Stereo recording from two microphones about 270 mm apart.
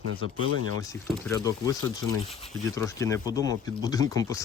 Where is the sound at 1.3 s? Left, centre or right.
Centre.